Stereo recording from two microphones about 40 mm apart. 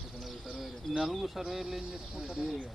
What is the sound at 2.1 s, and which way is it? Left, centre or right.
Speech, right.